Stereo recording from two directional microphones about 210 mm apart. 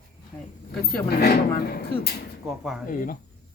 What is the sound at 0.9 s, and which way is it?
Speech, 50° left (ahead or behind).